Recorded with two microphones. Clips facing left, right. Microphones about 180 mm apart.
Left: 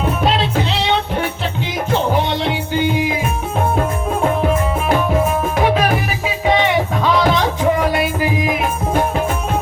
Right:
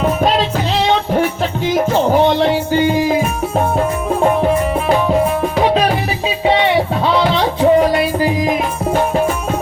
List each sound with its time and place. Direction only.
0.2 s music: 45° right (ahead or behind)
7.6 s music: 35° right (ahead or behind)